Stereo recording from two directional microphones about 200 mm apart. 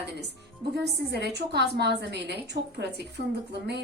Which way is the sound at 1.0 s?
60° right (ahead or behind).